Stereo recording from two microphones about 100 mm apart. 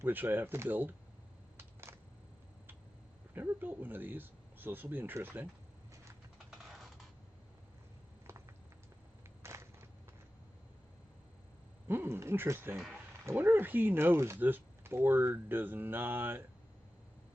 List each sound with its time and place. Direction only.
0.0 s speech: 20° right (ahead or behind)
1.5 s camera: 25° right (ahead or behind)
3.3 s speech: 20° right (ahead or behind)
6.5 s typing: centre (ahead or behind)
8.3 s a sound: 25° right (ahead or behind)
11.9 s speech: 25° right (ahead or behind)